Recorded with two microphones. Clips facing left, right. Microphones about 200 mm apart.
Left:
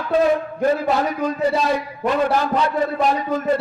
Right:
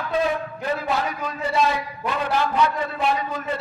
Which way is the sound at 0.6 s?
45° left (ahead or behind).